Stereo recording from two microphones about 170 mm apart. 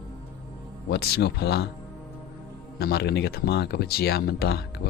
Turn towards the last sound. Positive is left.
turn(degrees=70)  # may be behind; listen again after turning